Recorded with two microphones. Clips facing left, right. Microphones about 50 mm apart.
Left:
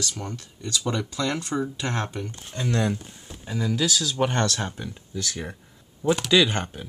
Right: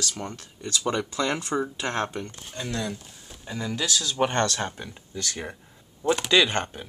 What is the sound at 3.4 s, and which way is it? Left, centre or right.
Speech, centre.